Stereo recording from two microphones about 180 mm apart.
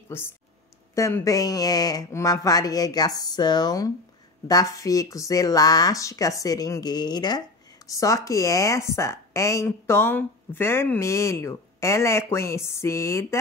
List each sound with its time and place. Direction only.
0.1 s speech: 15° left (ahead or behind)